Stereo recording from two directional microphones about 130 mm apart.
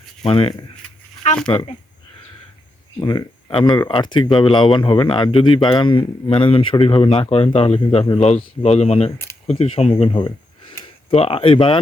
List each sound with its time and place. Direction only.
0.2 s speech: 45° left (ahead or behind)
1.2 s speech: 65° left (ahead or behind)
3.0 s speech: 30° left (ahead or behind)